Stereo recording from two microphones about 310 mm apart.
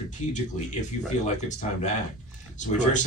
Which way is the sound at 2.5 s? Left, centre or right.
Left.